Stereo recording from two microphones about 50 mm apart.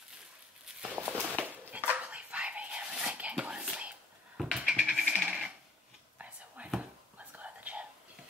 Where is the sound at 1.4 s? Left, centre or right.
Right.